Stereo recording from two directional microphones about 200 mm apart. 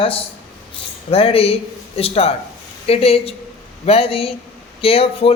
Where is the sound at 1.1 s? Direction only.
30° left (ahead or behind).